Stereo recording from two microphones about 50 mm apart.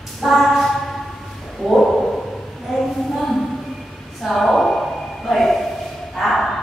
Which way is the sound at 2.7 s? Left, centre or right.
Centre.